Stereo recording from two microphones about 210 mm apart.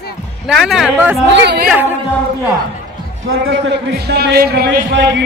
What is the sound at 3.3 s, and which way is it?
A man's voice, 50° right (ahead or behind).